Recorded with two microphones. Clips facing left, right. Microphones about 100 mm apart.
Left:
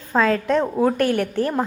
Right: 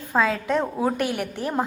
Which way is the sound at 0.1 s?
10° right (ahead or behind).